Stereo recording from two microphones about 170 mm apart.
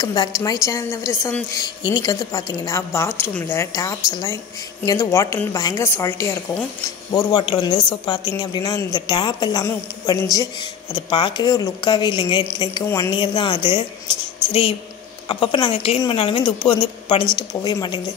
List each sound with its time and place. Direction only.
0.0 s a woman's voice: 20° left (ahead or behind)